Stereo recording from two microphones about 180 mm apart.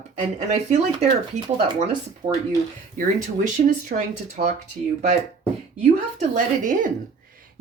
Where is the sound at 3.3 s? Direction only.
45° right (ahead or behind).